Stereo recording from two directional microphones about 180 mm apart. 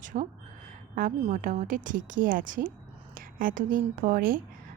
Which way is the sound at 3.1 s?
50° right (ahead or behind).